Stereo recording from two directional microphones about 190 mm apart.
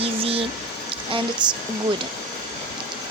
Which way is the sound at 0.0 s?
30° right (ahead or behind).